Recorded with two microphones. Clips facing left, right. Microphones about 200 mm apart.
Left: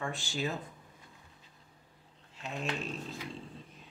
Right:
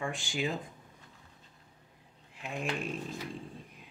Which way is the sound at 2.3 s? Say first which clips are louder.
Right 1 dB; 15° right (ahead or behind).